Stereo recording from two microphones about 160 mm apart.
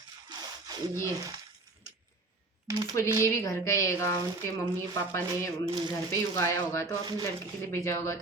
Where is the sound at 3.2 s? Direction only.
20° left (ahead or behind).